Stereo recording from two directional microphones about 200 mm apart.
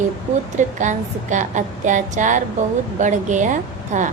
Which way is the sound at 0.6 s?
40° right (ahead or behind).